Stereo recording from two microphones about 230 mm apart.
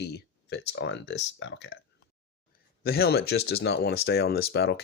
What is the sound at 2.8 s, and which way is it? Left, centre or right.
Speech, left.